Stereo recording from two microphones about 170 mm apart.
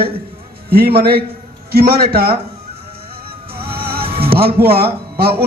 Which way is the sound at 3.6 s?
65° right (ahead or behind).